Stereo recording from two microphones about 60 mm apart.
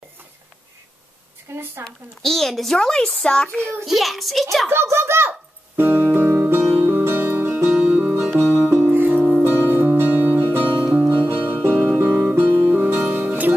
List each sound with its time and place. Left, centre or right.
1.5 s speech: right
1.9 s speech: centre
4.9 s a child's voice: right
5.8 s music: right
7.8 s music: right